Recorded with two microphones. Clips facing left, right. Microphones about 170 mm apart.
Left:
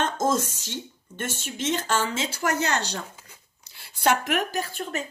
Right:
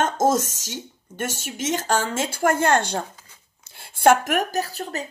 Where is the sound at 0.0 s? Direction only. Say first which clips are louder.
Right 4 dB; 45° right (ahead or behind).